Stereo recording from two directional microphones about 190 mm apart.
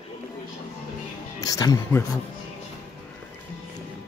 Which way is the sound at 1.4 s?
20° left (ahead or behind).